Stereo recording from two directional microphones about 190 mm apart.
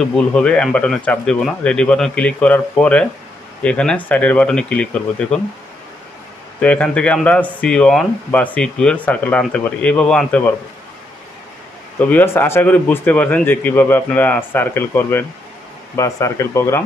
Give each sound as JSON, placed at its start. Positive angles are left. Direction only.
{"t": 0.0, "sound": "speech", "side_deg": 5}
{"t": 6.6, "sound": "speech", "side_deg": 5}
{"t": 12.0, "sound": "speech", "side_deg": 10}